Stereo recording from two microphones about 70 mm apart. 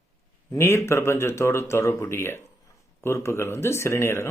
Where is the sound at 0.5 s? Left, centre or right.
Left.